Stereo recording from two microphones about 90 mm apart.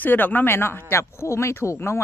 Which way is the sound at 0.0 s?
20° left (ahead or behind).